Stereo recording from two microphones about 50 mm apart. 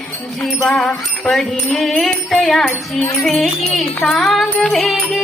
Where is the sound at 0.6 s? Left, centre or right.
Centre.